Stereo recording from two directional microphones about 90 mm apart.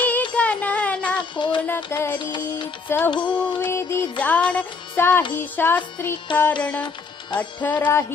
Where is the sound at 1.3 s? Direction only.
65° left (ahead or behind).